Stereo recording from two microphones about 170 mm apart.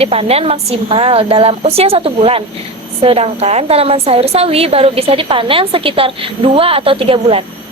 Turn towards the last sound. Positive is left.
turn(degrees=-35)  # may be behind; listen again after turning